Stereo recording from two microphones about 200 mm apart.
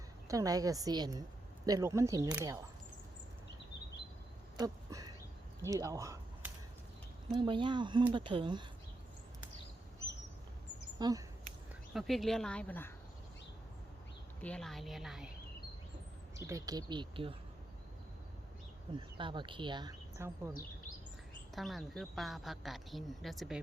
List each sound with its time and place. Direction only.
0.3 s a woman's voice: 15° right (ahead or behind)
4.6 s a sound: 20° right (ahead or behind)
5.6 s speech: 15° right (ahead or behind)
11.0 s speech: 15° right (ahead or behind)
11.9 s a woman's voice: centre (ahead or behind)
14.4 s a woman's voice: 5° left (ahead or behind)
16.5 s speech: 15° right (ahead or behind)
18.9 s speech: 25° right (ahead or behind)
21.5 s a woman's voice: centre (ahead or behind)